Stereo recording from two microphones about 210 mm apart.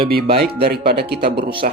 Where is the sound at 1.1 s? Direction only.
50° right (ahead or behind).